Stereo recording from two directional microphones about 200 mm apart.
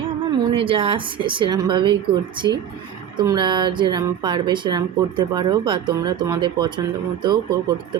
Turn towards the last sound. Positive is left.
turn(degrees=-20)  # may be behind; listen again after turning